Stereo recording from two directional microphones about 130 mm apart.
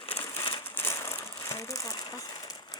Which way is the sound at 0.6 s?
20° left (ahead or behind).